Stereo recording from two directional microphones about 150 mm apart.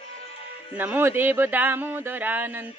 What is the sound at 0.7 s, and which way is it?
Speech, 10° right (ahead or behind).